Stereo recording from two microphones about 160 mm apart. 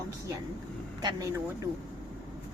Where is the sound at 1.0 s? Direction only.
20° right (ahead or behind).